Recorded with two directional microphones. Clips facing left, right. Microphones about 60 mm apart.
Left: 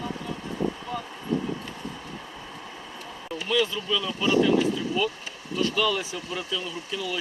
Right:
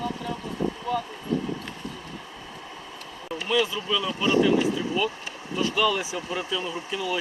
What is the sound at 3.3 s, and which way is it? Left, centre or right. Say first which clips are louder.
Speech: right 1 dB; centre.